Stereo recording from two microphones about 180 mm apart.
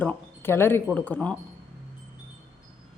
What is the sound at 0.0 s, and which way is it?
A woman's voice, 10° left (ahead or behind).